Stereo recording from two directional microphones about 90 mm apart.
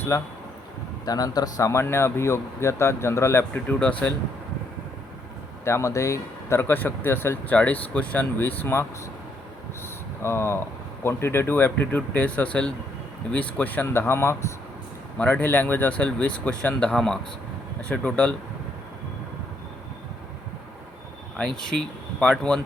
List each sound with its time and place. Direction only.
0.1 s speech: 35° left (ahead or behind)
3.5 s speech: 15° left (ahead or behind)
5.6 s speech: 35° left (ahead or behind)
10.2 s speech: 30° left (ahead or behind)
15.2 s speech: 15° left (ahead or behind)
21.3 s speech: 5° left (ahead or behind)